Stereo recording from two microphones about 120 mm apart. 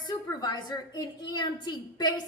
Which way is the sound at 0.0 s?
35° left (ahead or behind).